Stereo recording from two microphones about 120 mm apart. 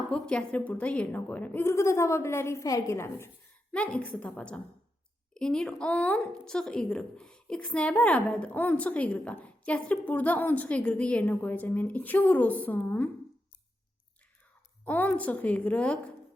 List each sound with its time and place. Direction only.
0.1 s a woman's voice: 10° left (ahead or behind)
3.7 s a woman's voice: 10° left (ahead or behind)
14.8 s a woman's voice: 15° left (ahead or behind)